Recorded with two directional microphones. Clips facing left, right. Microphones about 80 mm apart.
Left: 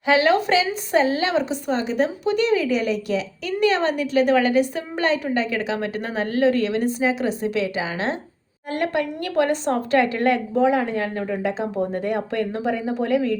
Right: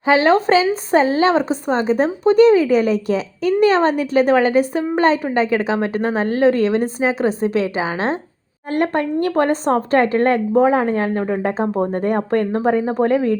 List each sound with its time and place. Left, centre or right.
0.0 s a woman's voice: right